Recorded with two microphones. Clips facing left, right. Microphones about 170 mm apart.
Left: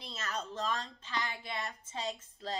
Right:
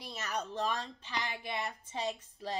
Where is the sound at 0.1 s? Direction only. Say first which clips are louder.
Right 2 dB; 15° right (ahead or behind).